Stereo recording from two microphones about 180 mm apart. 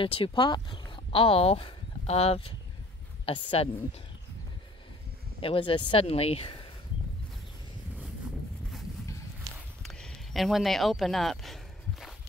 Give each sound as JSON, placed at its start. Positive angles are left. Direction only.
{"t": 0.0, "sound": "speech", "side_deg": 30}
{"t": 5.4, "sound": "speech", "side_deg": 30}
{"t": 9.8, "sound": "a sound", "side_deg": 0}